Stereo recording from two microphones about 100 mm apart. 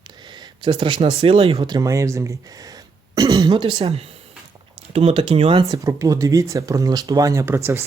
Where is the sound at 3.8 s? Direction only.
80° right.